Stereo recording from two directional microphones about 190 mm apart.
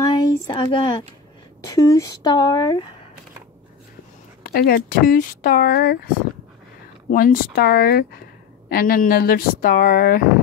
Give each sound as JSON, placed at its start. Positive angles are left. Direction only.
{"t": 0.1, "sound": "speech", "side_deg": 20}
{"t": 4.4, "sound": "speech", "side_deg": 55}
{"t": 7.1, "sound": "speech", "side_deg": 50}